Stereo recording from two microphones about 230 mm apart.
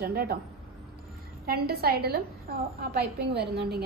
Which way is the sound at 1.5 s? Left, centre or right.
Right.